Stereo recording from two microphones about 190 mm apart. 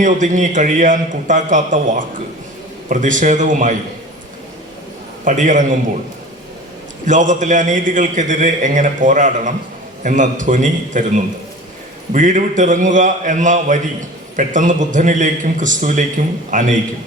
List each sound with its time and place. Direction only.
0.0 s a man's voice: 40° right (ahead or behind)
5.2 s a man's voice: 40° right (ahead or behind)
7.0 s a man's voice: 40° right (ahead or behind)